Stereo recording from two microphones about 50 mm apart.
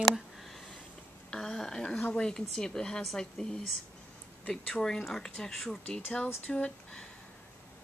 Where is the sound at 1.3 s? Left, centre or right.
Centre.